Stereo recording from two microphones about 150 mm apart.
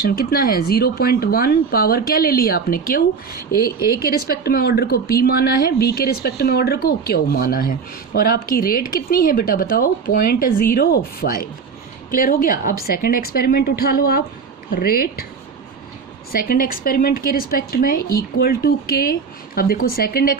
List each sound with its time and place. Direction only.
0.0 s speech: 75° left (ahead or behind)
4.4 s speech: 90° left
12.1 s speech: 70° left (ahead or behind); by 15.1 s 90° left
16.3 s speech: 75° left (ahead or behind)